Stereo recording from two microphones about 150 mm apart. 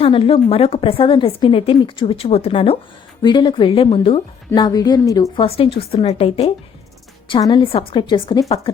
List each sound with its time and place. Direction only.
0.0 s a woman's voice: 40° left (ahead or behind)
5.4 s a woman's voice: 35° left (ahead or behind)